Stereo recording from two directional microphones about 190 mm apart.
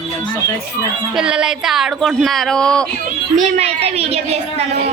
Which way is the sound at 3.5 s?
35° right (ahead or behind).